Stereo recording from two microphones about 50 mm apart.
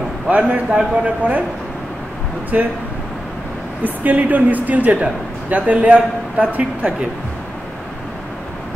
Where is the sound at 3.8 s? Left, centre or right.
Right.